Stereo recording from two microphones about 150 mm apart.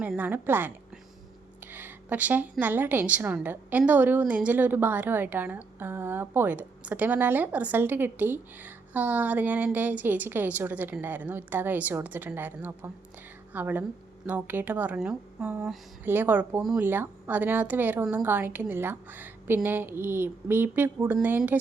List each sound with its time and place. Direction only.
0.0 s a woman's voice: 10° right (ahead or behind)